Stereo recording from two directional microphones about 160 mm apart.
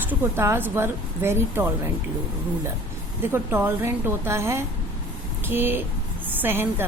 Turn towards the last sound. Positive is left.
turn(degrees=-15)  # may be behind; listen again after turning